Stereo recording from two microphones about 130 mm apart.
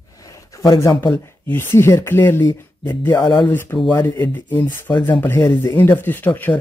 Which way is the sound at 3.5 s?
15° left (ahead or behind).